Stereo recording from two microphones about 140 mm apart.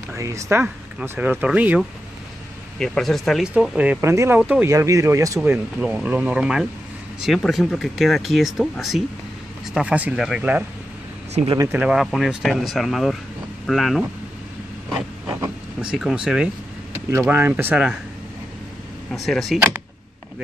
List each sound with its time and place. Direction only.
0.1 s speech: 20° right (ahead or behind)
2.8 s speech: 5° left (ahead or behind)
3.7 s speech: 10° right (ahead or behind)
4.6 s speech: 20° right (ahead or behind); by 10.6 s 5° right (ahead or behind)
11.4 s speech: 50° right (ahead or behind)
11.7 s speech: 5° right (ahead or behind)
14.9 s a sound: 15° right (ahead or behind)
17.3 s speech: 15° right (ahead or behind)
19.1 s speech: centre (ahead or behind)